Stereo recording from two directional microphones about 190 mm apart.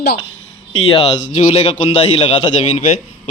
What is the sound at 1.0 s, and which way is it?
A man's voice, 35° left (ahead or behind).